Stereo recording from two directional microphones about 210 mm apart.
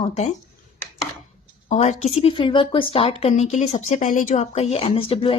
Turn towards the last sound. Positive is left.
turn(degrees=25)  # may be behind; listen again after turning